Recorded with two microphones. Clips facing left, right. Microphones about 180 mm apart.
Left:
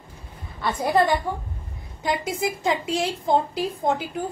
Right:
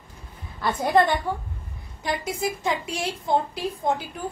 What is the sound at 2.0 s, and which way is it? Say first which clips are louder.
A woman's voice: left 2 dB; 20° left (ahead or behind).